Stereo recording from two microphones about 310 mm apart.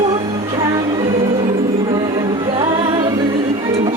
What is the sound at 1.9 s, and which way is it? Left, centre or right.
Music, centre.